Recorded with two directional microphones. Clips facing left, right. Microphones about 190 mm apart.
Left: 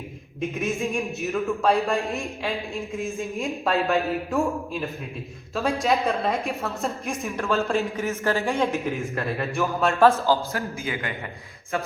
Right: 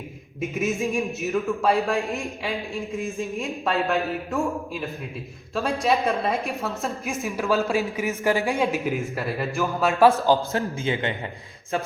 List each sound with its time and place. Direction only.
0.6 s a woman's voice: centre (ahead or behind)
10.1 s a man's voice: 15° right (ahead or behind)
10.8 s a man's voice: 25° right (ahead or behind)